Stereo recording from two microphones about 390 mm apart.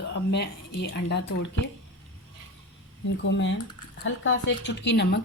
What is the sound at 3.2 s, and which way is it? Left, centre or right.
Speech, left.